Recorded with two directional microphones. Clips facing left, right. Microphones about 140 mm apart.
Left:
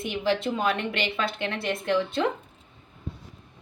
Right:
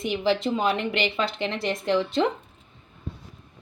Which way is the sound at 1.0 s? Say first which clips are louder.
Right 2 dB; 15° right (ahead or behind).